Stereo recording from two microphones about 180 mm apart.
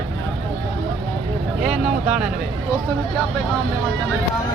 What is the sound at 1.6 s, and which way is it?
Speech, 5° right (ahead or behind).